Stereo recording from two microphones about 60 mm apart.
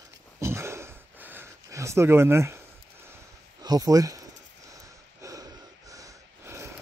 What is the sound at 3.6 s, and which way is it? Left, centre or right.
Speech, right.